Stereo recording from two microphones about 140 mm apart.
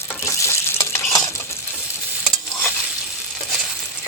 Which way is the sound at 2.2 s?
5° left (ahead or behind).